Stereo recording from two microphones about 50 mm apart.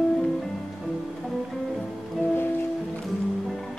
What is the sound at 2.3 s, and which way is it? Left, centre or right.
Music, left.